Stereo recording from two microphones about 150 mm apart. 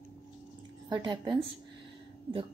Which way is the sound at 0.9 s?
30° right (ahead or behind).